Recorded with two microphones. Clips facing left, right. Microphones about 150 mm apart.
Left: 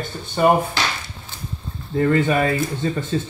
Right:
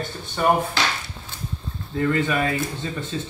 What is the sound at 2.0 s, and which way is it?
Speech, 35° left (ahead or behind).